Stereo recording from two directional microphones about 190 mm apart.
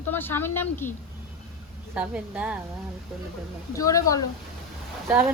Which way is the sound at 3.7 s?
15° left (ahead or behind).